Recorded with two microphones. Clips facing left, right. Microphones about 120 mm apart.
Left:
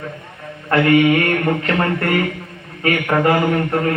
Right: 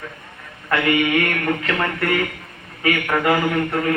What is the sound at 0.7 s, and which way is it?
A man's voice, 40° left (ahead or behind).